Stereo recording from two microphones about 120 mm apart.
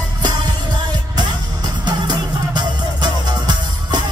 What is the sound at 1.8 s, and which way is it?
Music, 35° right (ahead or behind).